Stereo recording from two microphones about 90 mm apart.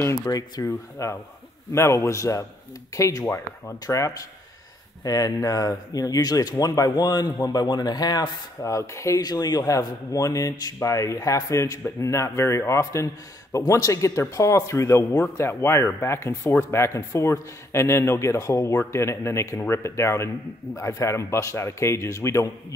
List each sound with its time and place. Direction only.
0.2 s speech: 45° left (ahead or behind)
0.7 s speech: 30° left (ahead or behind)
9.2 s speech: 45° left (ahead or behind)